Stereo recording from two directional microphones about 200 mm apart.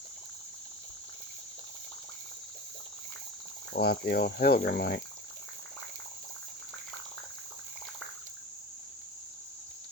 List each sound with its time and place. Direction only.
3.8 s speech: 50° left (ahead or behind)